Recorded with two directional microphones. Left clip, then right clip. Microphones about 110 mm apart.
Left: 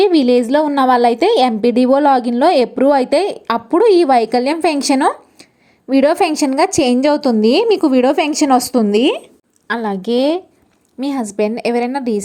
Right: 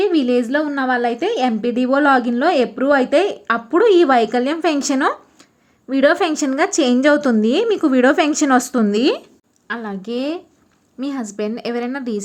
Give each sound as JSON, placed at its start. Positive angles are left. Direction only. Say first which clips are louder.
{"t": 0.0, "sound": "a woman's voice", "louder": "left 5 dB", "side_deg": 35}
{"t": 9.6, "sound": "a woman's voice", "louder": "left 7 dB", "side_deg": 50}